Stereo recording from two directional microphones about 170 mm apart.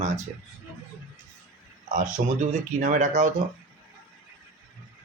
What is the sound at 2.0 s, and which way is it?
Speech, 45° right (ahead or behind).